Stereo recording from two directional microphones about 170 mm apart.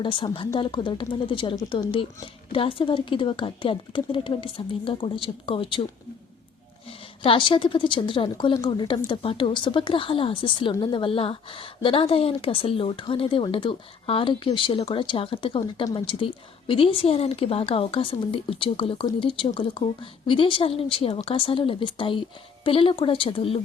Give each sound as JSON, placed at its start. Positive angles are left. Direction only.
{"t": 0.0, "sound": "a woman's voice", "side_deg": 30}
{"t": 7.2, "sound": "a woman's voice", "side_deg": 30}